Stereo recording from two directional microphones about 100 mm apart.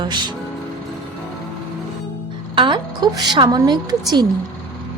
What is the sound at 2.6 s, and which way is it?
A woman's voice, 55° right (ahead or behind).